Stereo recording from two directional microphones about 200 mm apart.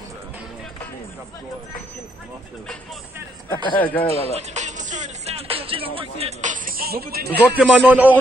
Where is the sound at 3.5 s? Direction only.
25° left (ahead or behind).